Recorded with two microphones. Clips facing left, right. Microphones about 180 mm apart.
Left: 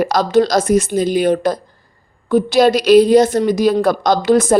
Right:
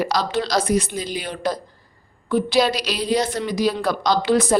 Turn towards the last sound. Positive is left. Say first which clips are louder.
# left 5 dB
turn(degrees=45)  # may be behind; listen again after turning